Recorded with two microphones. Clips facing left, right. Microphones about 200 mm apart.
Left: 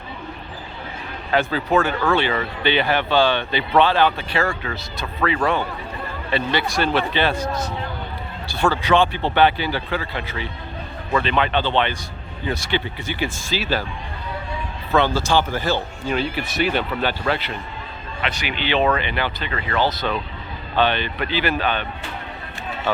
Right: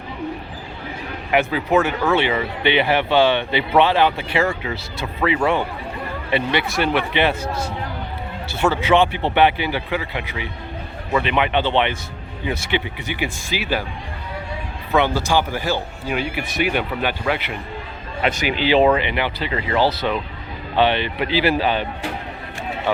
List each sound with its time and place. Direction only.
1.3 s speech: 15° right (ahead or behind)
8.4 s speech: 20° right (ahead or behind)
14.9 s speech: 15° right (ahead or behind)
18.3 s speech: 45° right (ahead or behind)
18.9 s speech: 20° right (ahead or behind)